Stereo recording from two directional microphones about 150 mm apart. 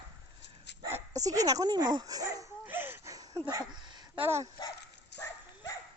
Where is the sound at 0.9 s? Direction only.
15° right (ahead or behind).